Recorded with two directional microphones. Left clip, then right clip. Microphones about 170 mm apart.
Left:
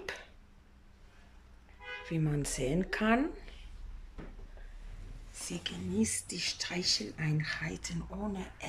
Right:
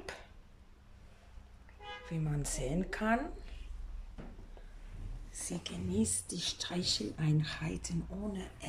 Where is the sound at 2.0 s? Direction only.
Centre (ahead or behind).